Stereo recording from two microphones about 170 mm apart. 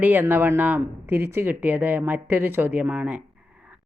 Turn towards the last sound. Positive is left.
turn(degrees=-10)  # may be behind; listen again after turning